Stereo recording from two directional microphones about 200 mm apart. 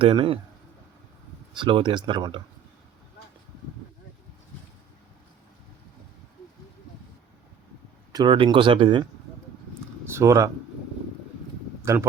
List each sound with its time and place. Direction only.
0.0 s speech: 25° right (ahead or behind)
1.5 s speech: 25° right (ahead or behind)
8.1 s speech: 25° right (ahead or behind)
10.1 s speech: 15° right (ahead or behind)